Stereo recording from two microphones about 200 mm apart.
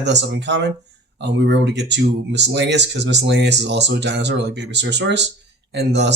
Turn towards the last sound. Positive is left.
turn(degrees=-60)  # may be behind; listen again after turning